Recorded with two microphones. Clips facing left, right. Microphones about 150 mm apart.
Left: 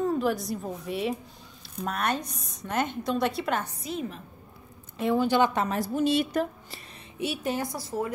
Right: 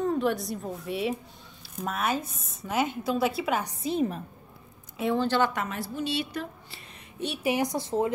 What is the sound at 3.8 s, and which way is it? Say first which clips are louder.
Speech: right 6 dB; 35° right (ahead or behind).